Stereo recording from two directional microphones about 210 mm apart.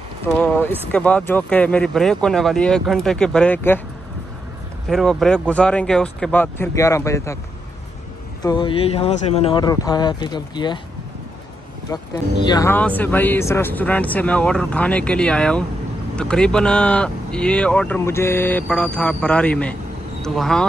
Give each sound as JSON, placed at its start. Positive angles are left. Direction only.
{"t": 0.4, "sound": "speech", "side_deg": 5}
{"t": 4.8, "sound": "speech", "side_deg": 0}
{"t": 8.4, "sound": "speech", "side_deg": 20}
{"t": 11.9, "sound": "speech", "side_deg": 20}